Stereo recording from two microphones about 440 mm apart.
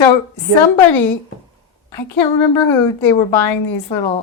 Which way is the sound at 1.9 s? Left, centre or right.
Left.